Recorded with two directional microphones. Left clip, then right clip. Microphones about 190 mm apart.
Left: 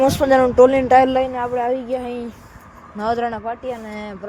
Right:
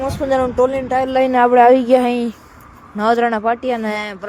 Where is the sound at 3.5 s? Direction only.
55° right (ahead or behind).